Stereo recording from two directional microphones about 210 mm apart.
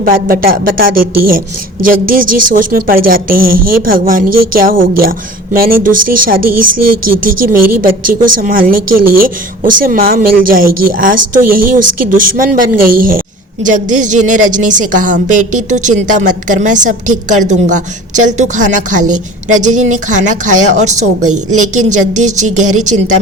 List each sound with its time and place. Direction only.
0.0 s a woman's voice: 45° right (ahead or behind)